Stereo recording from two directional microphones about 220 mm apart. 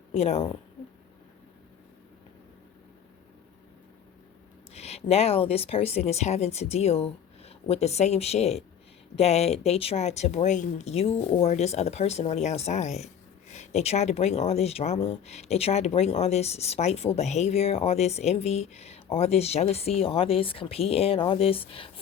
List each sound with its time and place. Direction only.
0.1 s speech: 30° left (ahead or behind)
4.7 s speech: 30° left (ahead or behind)